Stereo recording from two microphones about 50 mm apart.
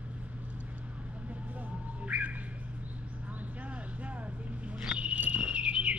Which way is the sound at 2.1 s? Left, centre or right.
Right.